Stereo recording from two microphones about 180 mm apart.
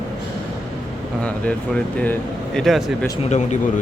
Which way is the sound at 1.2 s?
5° left (ahead or behind).